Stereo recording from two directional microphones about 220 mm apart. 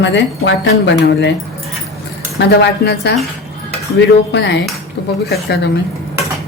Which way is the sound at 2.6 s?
50° left (ahead or behind).